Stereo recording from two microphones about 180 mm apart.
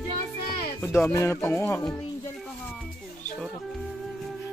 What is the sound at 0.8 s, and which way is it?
Music, 15° left (ahead or behind).